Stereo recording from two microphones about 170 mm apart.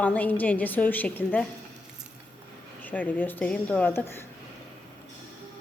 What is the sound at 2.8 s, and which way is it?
A woman's voice, 10° left (ahead or behind).